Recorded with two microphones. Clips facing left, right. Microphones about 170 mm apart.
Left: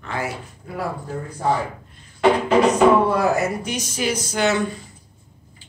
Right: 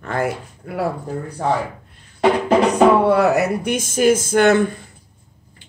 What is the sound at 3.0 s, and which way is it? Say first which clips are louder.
A woman's voice: right 4 dB; 70° right (ahead or behind).